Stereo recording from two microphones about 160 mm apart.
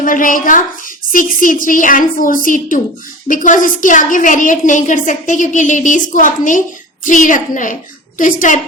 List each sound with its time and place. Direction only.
0.0 s a woman's voice: 55° left (ahead or behind)